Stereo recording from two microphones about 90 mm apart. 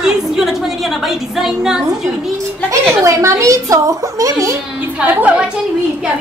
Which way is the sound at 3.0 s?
35° right (ahead or behind).